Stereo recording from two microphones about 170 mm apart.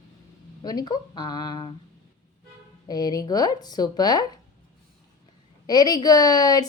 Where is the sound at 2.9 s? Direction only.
25° left (ahead or behind).